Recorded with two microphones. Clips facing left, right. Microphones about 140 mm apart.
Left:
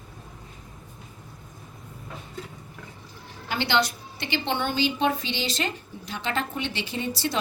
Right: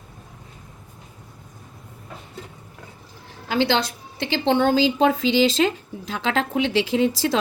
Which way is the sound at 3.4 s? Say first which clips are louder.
Right 6 dB; 90° right.